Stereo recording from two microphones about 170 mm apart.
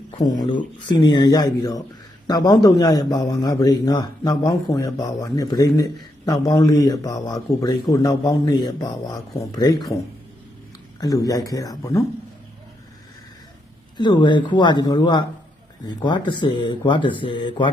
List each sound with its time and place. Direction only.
0.3 s a man's voice: 25° left (ahead or behind)
11.0 s a man's voice: 20° left (ahead or behind)
13.9 s a man's voice: 25° left (ahead or behind)